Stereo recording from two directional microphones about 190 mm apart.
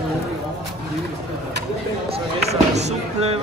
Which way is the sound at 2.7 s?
35° right (ahead or behind).